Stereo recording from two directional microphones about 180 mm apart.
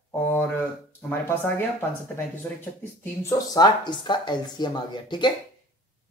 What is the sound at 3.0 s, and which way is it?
Speech, 15° left (ahead or behind).